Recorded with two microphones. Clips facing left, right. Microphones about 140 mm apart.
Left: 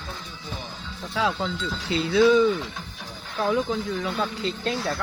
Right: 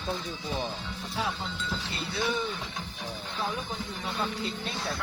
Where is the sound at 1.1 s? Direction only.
90° left.